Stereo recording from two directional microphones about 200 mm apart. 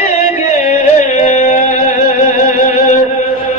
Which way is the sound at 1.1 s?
35° left (ahead or behind).